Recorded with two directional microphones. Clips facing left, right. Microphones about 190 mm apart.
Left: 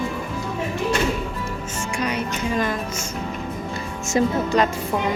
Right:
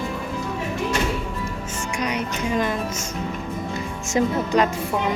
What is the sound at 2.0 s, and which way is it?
Music, 15° right (ahead or behind).